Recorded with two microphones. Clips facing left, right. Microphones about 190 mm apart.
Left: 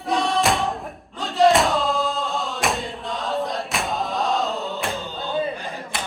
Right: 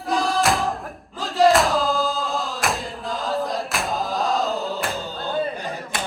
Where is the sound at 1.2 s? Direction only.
Centre (ahead or behind).